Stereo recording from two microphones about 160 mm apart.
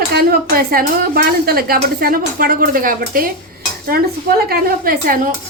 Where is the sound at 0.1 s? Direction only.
70° right (ahead or behind).